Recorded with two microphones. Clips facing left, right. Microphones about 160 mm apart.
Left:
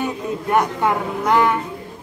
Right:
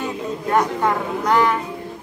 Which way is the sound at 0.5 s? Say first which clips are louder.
Even; 15° left (ahead or behind).